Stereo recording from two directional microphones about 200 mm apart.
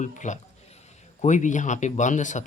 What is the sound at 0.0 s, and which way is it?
Speech, 40° left (ahead or behind).